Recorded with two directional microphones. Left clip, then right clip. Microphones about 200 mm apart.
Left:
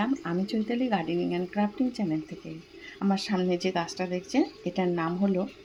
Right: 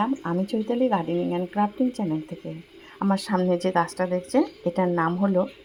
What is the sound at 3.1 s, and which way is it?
Speech, 20° right (ahead or behind).